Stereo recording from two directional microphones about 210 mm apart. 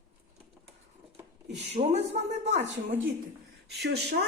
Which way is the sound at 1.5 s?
55° right (ahead or behind).